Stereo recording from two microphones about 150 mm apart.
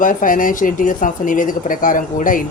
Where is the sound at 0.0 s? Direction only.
60° left (ahead or behind).